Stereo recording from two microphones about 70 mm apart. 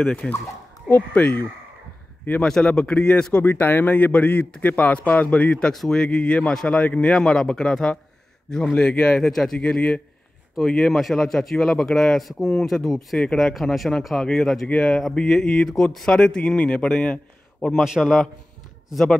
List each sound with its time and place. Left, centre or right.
0.2 s speech: centre
0.8 s a man's voice: left
2.6 s a man's voice: centre
10.8 s speech: centre
17.7 s speech: centre